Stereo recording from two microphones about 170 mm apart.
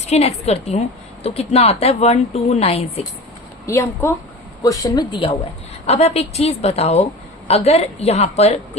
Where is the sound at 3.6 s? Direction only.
15° left (ahead or behind).